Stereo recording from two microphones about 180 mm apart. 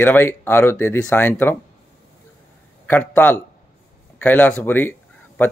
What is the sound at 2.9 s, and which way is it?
A man's voice, 10° left (ahead or behind).